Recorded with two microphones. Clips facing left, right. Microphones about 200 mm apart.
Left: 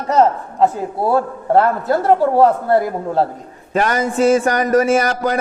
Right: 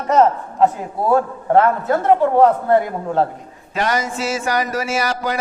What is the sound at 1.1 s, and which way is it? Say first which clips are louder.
A man's voice: right 1 dB; 35° left (ahead or behind).